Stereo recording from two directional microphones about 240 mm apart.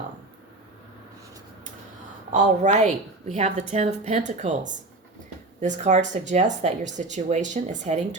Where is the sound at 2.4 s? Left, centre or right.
Right.